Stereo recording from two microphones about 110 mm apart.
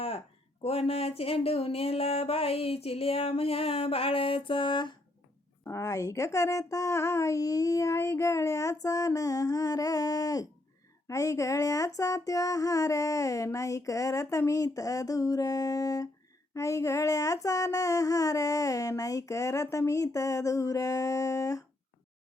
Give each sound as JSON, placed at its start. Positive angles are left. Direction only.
{"t": 0.6, "sound": "speech", "side_deg": 65}
{"t": 5.6, "sound": "speech", "side_deg": 30}
{"t": 11.1, "sound": "a sound", "side_deg": 30}